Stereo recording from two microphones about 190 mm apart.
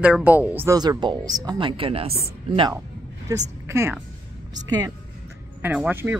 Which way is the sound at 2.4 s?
25° right (ahead or behind).